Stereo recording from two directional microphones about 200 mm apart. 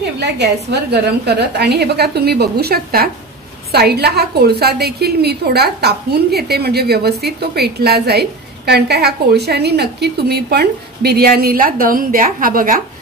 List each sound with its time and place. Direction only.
0.2 s a woman's voice: 60° right (ahead or behind)